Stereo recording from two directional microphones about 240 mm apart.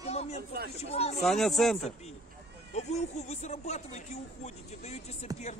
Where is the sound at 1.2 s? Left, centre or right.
Centre.